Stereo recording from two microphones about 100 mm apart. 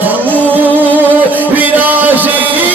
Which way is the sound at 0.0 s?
20° right (ahead or behind).